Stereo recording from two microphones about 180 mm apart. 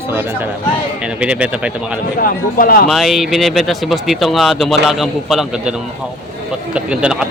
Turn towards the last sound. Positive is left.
turn(degrees=-5)  # may be behind; listen again after turning